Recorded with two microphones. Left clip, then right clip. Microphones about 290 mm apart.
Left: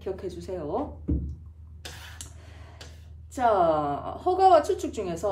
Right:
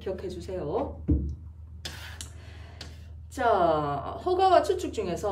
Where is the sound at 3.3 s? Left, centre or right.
Centre.